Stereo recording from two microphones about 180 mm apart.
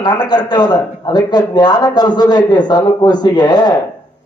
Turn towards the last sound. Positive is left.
turn(degrees=20)  # may be behind; listen again after turning